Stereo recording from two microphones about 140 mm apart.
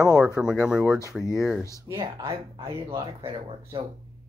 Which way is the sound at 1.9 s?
35° right (ahead or behind).